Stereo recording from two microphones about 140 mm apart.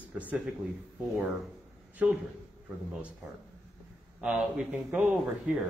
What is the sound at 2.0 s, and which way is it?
Speech, 10° right (ahead or behind).